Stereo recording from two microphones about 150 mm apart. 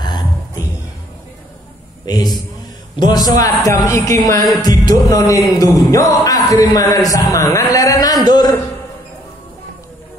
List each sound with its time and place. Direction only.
3.0 s music: 25° left (ahead or behind)
7.7 s a man's voice: 25° left (ahead or behind)